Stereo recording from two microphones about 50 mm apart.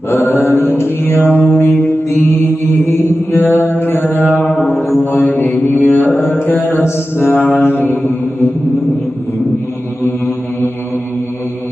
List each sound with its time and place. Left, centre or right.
0.1 s mantra: left
10.0 s mantra: left